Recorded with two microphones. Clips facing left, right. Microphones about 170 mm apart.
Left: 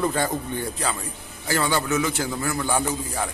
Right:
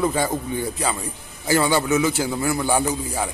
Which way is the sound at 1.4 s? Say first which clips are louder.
Right 4 dB; 10° right (ahead or behind).